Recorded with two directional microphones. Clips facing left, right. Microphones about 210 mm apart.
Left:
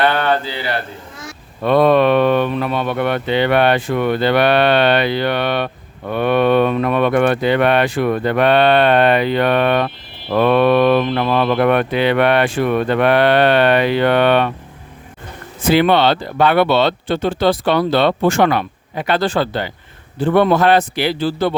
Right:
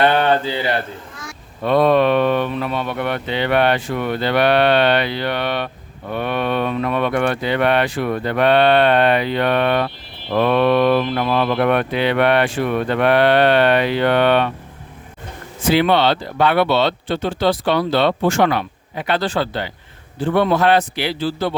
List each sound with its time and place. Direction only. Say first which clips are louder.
0.0 s a sound: right 1 dB; 20° right (ahead or behind)
1.6 s speech: left 2 dB; 60° left (ahead or behind)
13.0 s speech: even; 55° left (ahead or behind)
15.7 s speech: left 2 dB; 55° left (ahead or behind)